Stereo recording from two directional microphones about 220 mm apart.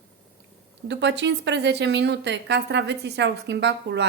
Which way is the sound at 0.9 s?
55° right (ahead or behind).